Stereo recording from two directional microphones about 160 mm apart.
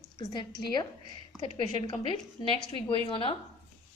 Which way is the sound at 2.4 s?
30° left (ahead or behind).